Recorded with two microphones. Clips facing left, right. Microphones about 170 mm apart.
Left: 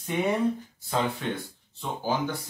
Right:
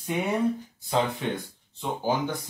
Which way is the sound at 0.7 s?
15° right (ahead or behind).